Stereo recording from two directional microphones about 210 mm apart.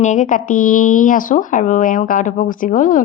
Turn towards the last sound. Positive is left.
turn(degrees=40)  # may be behind; listen again after turning